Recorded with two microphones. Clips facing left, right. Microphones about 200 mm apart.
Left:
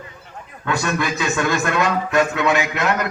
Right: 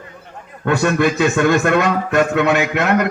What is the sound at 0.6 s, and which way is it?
A man's voice, 55° right (ahead or behind).